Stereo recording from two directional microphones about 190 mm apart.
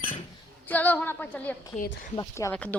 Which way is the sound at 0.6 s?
10° left (ahead or behind).